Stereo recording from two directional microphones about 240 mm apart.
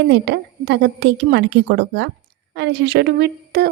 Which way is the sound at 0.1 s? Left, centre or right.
Right.